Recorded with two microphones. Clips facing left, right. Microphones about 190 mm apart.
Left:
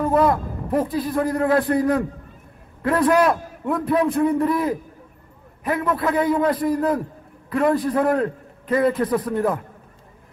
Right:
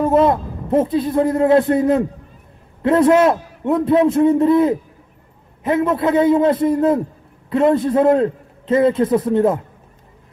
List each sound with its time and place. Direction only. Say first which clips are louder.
0.0 s a man's voice: right 4 dB; 25° right (ahead or behind)